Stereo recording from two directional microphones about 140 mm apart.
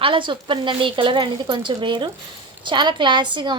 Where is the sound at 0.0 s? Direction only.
35° right (ahead or behind).